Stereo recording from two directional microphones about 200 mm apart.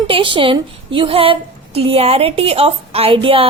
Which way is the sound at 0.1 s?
25° right (ahead or behind).